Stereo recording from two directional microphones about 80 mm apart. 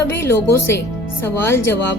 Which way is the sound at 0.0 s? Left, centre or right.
Left.